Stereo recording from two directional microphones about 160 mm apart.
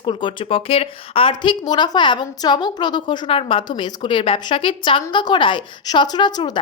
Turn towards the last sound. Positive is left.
turn(degrees=25)  # may be behind; listen again after turning